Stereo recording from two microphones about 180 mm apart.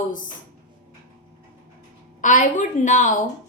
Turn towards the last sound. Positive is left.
turn(degrees=45)  # may be behind; listen again after turning